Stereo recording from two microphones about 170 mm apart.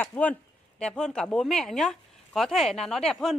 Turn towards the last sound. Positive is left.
turn(degrees=5)  # may be behind; listen again after turning